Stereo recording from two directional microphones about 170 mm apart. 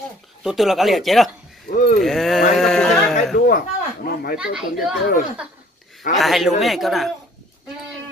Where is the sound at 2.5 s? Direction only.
Centre (ahead or behind).